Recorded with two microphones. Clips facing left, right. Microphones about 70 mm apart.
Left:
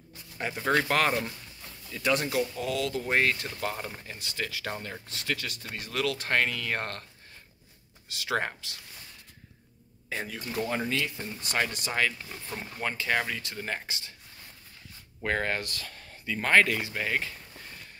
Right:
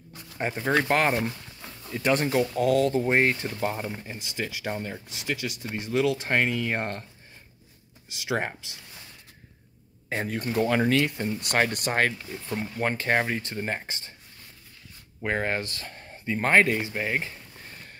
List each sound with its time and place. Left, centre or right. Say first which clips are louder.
0.4 s speech: right 4 dB; right
0.7 s speech: right 2 dB; centre
1.6 s speech: right 4 dB; right
2.8 s speech: right 5 dB; right
3.7 s speech: right 4 dB; centre
8.1 s speech: right 1 dB; centre
10.0 s speech: right 6 dB; right
15.2 s speech: right 2 dB; centre